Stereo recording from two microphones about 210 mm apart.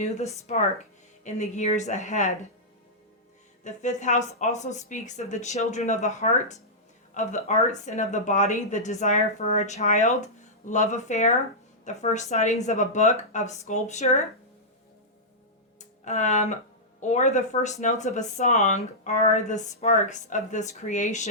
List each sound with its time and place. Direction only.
1.2 s speech: 35° left (ahead or behind)
3.6 s speech: 35° left (ahead or behind)
15.8 s music: 35° left (ahead or behind)
17.0 s speech: 35° left (ahead or behind)